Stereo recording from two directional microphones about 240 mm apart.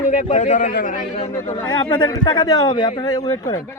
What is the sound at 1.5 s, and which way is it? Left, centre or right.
Speech, centre.